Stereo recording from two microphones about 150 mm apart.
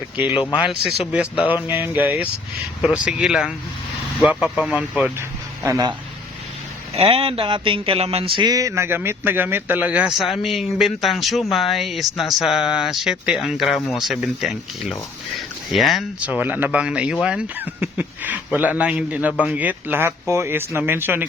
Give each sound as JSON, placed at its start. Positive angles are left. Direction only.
{"t": 0.6, "sound": "speech", "side_deg": -5}
{"t": 5.6, "sound": "speech", "side_deg": -20}
{"t": 6.9, "sound": "a sound", "side_deg": -40}
{"t": 9.0, "sound": "speech", "side_deg": -15}